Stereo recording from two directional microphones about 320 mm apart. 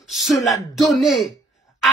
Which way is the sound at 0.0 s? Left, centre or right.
Centre.